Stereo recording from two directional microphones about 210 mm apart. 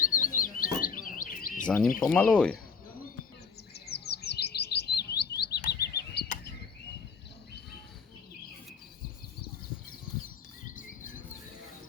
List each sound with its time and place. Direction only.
0.0 s chirp: 40° left (ahead or behind)
1.6 s speech: 5° left (ahead or behind)
3.8 s chirp: 50° left (ahead or behind)
10.8 s a sound: 40° left (ahead or behind)